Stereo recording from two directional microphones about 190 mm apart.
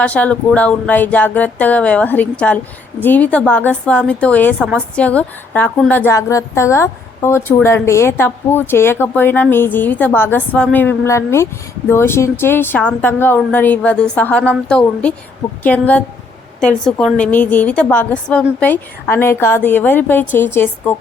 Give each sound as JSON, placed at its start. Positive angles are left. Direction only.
{"t": 0.0, "sound": "a woman's voice", "side_deg": 5}